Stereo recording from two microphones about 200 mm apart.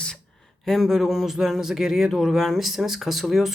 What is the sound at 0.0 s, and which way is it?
Speech, 5° left (ahead or behind).